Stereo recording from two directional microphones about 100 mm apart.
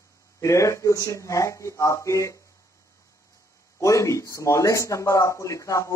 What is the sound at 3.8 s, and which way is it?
Speech, 30° left (ahead or behind).